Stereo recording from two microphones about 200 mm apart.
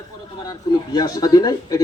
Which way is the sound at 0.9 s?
20° left (ahead or behind).